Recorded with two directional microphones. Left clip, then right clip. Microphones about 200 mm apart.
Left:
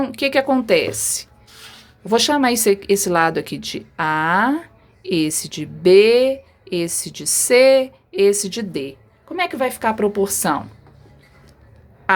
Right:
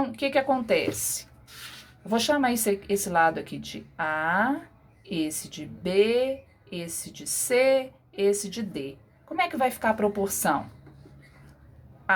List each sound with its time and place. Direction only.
0.0 s a woman's voice: 40° left (ahead or behind)
12.1 s quack: 40° left (ahead or behind)